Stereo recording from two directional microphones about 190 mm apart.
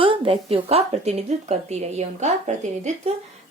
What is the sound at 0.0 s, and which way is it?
Speech, 25° right (ahead or behind).